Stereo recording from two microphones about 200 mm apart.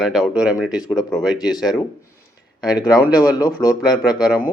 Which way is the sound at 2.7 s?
20° left (ahead or behind).